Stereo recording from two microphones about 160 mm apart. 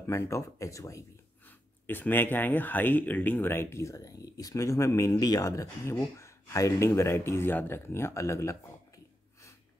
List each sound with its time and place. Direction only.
0.0 s speech: 15° left (ahead or behind)